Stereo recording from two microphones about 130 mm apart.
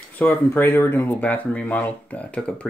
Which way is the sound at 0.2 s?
15° left (ahead or behind).